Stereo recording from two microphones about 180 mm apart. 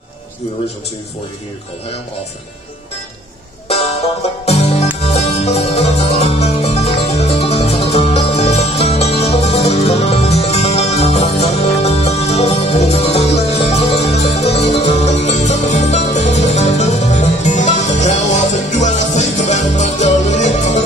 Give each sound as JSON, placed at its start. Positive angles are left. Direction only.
{"t": 3.6, "sound": "music", "side_deg": 35}